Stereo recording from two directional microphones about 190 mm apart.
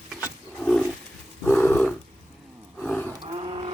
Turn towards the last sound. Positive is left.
turn(degrees=-30)  # may be behind; listen again after turning